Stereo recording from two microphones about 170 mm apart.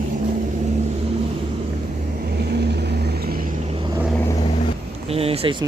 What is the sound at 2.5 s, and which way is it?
Vehicle, 75° right (ahead or behind).